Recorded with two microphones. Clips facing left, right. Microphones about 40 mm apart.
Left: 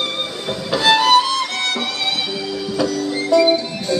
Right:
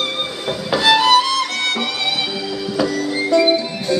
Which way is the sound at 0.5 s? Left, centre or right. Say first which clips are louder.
Right 1 dB; centre.